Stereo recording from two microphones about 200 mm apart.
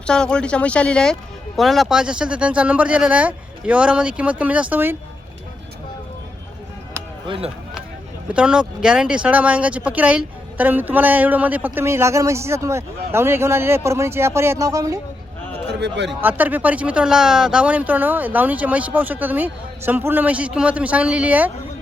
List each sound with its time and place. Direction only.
0.0 s speech: 5° left (ahead or behind)
7.3 s speech: 30° right (ahead or behind)
8.3 s speech: 5° right (ahead or behind)
15.8 s speech: 60° right (ahead or behind)
16.2 s speech: 10° right (ahead or behind)